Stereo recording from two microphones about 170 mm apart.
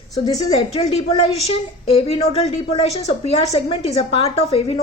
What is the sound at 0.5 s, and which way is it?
A woman's voice, 35° left (ahead or behind).